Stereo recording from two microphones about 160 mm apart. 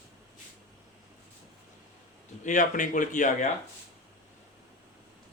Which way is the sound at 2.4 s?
50° left (ahead or behind).